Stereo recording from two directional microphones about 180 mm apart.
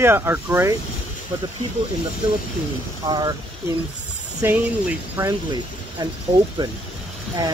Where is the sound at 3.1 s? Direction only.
25° right (ahead or behind).